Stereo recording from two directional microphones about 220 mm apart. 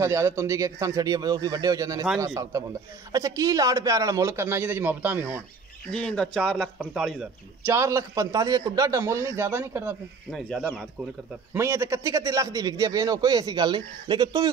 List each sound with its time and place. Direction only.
0.0 s a man's voice: 10° right (ahead or behind)
5.9 s a man's voice: 5° left (ahead or behind)
11.5 s a man's voice: 10° right (ahead or behind)